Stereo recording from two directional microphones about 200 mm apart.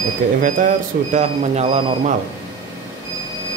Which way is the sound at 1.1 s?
35° right (ahead or behind).